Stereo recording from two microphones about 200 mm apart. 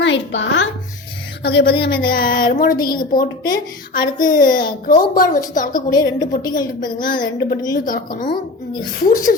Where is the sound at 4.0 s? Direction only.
20° left (ahead or behind).